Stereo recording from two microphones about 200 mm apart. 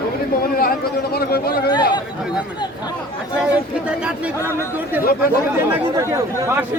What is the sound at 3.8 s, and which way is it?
Speech, 5° right (ahead or behind).